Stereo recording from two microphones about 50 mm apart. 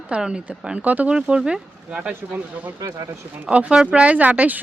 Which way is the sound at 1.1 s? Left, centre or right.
Centre.